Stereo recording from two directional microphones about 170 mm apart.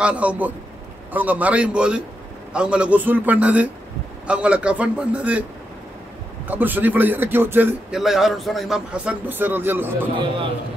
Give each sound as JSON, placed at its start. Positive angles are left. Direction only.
{"t": 0.0, "sound": "a man's voice", "side_deg": -5}
{"t": 6.4, "sound": "a man's voice", "side_deg": -10}